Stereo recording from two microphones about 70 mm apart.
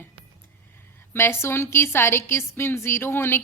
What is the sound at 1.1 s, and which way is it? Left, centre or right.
A woman's voice, left.